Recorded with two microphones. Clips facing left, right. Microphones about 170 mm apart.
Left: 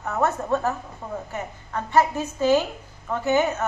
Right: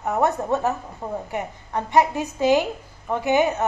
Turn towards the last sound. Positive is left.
turn(degrees=-15)  # may be behind; listen again after turning